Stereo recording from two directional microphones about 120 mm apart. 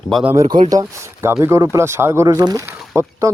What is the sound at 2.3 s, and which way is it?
Speech, 35° right (ahead or behind).